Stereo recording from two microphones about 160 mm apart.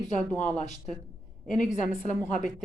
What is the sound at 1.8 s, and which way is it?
Speech, 55° left (ahead or behind).